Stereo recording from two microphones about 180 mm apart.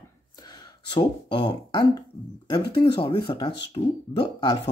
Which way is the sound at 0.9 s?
25° left (ahead or behind).